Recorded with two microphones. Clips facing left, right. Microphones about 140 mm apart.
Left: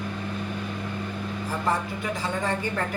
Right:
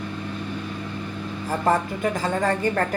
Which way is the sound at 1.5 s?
45° right (ahead or behind).